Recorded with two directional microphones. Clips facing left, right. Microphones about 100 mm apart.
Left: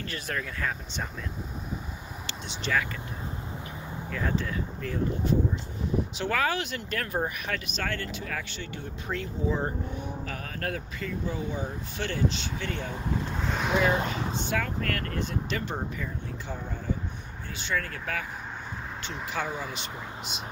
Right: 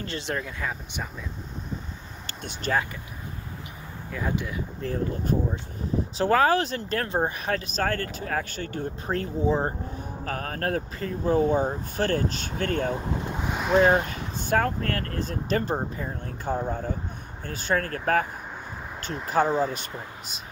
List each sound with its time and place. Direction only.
0.0 s speech: 25° right (ahead or behind)
0.6 s speech: 10° right (ahead or behind)
2.2 s speech: 45° right (ahead or behind)
4.1 s speech: 15° right (ahead or behind)
4.8 s speech: 45° right (ahead or behind)
12.9 s speech: 15° right (ahead or behind)
13.7 s speech: 40° right (ahead or behind)
14.8 s speech: 35° right (ahead or behind)
19.2 s speech: 40° right (ahead or behind)